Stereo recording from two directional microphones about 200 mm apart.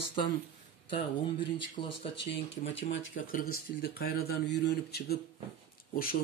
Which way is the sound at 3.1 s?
45° left (ahead or behind).